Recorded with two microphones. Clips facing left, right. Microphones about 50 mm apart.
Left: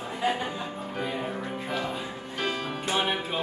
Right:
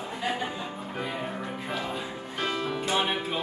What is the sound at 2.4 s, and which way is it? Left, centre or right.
Music, centre.